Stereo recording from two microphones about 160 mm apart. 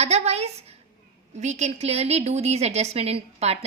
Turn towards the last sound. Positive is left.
turn(degrees=-40)  # may be behind; listen again after turning